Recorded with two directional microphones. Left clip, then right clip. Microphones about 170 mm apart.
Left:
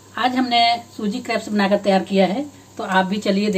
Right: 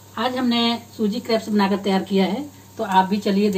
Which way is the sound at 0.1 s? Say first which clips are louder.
Left 4 dB; 30° left (ahead or behind).